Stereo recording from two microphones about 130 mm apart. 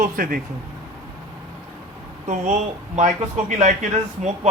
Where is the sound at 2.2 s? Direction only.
65° right (ahead or behind); by 3.8 s 80° right.